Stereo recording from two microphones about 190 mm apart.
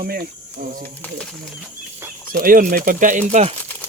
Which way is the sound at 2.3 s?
45° right (ahead or behind).